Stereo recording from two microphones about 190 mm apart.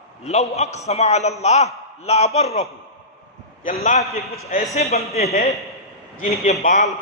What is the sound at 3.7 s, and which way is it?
A man's voice, 35° left (ahead or behind).